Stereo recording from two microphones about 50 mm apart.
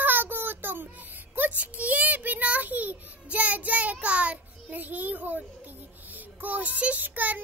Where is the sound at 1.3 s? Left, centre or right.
Right.